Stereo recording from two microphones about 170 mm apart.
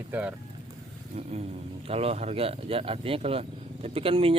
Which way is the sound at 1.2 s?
40° right (ahead or behind).